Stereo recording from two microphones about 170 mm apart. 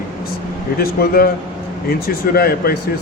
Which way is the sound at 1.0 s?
60° left (ahead or behind).